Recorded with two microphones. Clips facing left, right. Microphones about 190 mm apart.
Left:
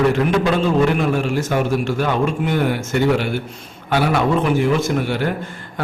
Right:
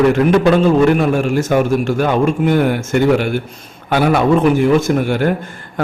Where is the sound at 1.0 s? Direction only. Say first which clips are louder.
Right 4 dB; 45° right (ahead or behind).